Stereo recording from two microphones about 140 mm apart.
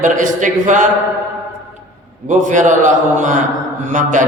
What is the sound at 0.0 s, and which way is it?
Speech, 65° right (ahead or behind).